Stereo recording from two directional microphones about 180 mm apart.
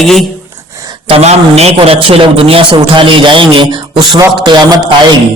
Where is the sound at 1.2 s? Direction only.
35° right (ahead or behind).